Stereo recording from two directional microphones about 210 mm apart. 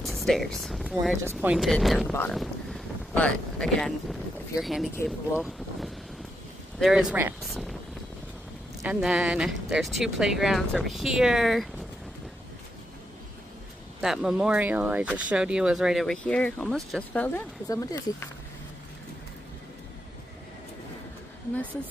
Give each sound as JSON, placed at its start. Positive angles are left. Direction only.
{"t": 0.0, "sound": "speech", "side_deg": 0}
{"t": 1.2, "sound": "speech", "side_deg": -10}
{"t": 8.8, "sound": "speech", "side_deg": -5}
{"t": 14.0, "sound": "speech", "side_deg": 0}